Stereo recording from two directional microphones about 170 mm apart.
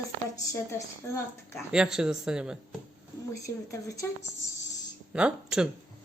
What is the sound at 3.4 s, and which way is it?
Speech, 20° left (ahead or behind).